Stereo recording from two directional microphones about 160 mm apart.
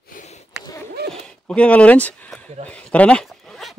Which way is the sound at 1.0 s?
90° right.